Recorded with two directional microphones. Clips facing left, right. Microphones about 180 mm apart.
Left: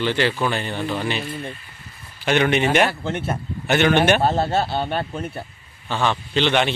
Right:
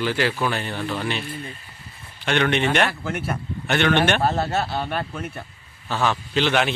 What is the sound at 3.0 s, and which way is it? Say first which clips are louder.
Speech: left 2 dB; 25° left (ahead or behind).